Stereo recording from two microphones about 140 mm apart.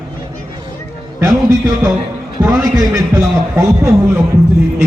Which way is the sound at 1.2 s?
25° right (ahead or behind).